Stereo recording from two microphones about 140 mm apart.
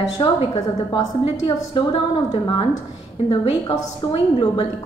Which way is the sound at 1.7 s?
40° left (ahead or behind).